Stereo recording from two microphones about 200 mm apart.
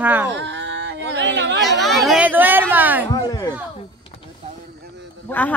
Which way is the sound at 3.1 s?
20° left (ahead or behind).